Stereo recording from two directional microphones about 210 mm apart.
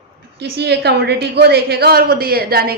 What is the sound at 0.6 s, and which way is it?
A woman's voice, 50° right (ahead or behind).